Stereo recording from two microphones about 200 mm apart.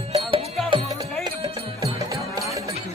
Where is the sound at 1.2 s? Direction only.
20° right (ahead or behind).